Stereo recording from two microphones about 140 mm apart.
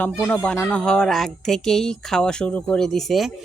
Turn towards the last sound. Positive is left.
turn(degrees=0)  # may be behind; listen again after turning